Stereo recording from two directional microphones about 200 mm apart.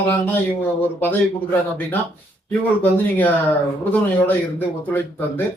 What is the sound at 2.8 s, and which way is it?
Speech, 10° left (ahead or behind).